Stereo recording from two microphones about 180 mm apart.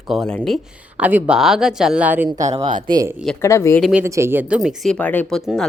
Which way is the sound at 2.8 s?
20° right (ahead or behind).